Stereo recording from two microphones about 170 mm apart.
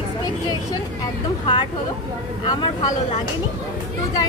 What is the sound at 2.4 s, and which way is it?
Speech, 30° left (ahead or behind).